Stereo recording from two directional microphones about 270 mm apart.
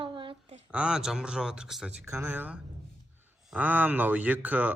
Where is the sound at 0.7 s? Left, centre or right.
Centre.